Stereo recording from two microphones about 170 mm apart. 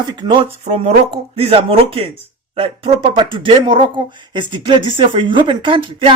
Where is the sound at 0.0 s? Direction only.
25° right (ahead or behind).